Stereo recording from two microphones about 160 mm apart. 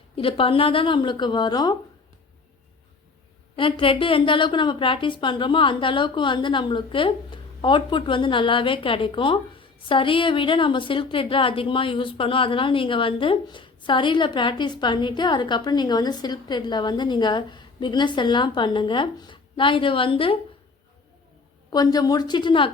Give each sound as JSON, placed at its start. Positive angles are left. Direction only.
{"t": 0.2, "sound": "a woman's voice", "side_deg": 35}
{"t": 3.5, "sound": "a woman's voice", "side_deg": 35}
{"t": 21.7, "sound": "a woman's voice", "side_deg": 25}